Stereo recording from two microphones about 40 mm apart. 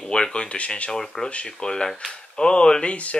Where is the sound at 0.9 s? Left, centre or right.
Centre.